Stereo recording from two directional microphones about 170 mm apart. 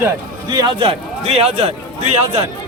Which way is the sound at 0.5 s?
25° right (ahead or behind).